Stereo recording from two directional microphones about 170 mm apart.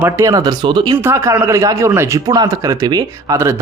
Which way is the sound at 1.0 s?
15° right (ahead or behind).